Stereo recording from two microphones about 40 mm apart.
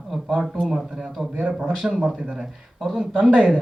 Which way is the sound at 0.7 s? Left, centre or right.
Centre.